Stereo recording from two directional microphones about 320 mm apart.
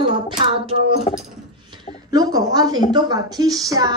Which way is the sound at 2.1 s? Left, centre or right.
Centre.